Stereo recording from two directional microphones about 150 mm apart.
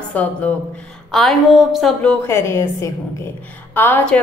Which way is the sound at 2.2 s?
20° left (ahead or behind).